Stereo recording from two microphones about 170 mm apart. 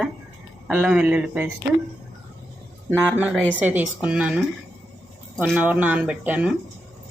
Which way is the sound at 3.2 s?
5° right (ahead or behind).